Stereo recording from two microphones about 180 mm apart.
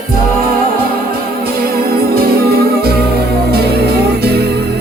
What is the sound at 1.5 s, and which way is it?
Music, 55° right (ahead or behind).